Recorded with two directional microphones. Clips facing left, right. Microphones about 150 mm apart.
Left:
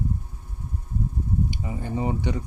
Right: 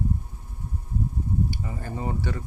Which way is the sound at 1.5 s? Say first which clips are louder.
Left 3 dB; 15° left (ahead or behind).